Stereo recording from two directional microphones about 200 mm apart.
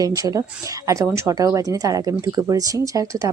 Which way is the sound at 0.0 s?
20° right (ahead or behind).